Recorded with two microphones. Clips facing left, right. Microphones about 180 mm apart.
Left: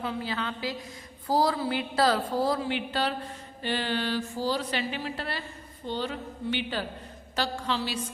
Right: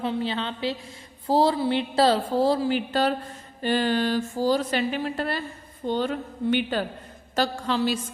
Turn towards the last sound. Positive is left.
turn(degrees=-50)  # may be behind; listen again after turning